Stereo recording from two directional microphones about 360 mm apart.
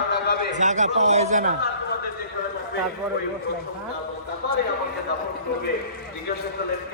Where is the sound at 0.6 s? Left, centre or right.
Centre.